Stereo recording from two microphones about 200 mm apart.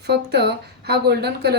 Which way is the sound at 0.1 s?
55° right (ahead or behind).